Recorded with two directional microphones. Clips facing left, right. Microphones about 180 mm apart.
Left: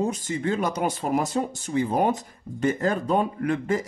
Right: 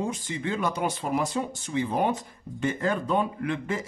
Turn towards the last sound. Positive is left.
turn(degrees=40)  # may be behind; listen again after turning